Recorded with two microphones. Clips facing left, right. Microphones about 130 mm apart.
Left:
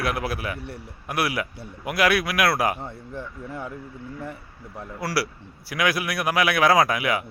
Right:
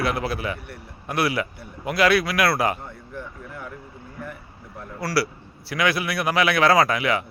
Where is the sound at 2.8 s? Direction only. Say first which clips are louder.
Left 2 dB; 30° left (ahead or behind).